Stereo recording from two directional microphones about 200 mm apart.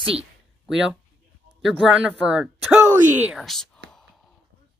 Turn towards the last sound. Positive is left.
turn(degrees=0)  # may be behind; listen again after turning